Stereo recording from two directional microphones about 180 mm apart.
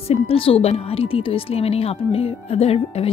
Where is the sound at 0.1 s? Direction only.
30° left (ahead or behind).